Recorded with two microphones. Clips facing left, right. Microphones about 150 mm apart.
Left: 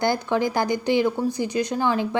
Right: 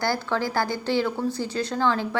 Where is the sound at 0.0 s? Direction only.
20° left (ahead or behind).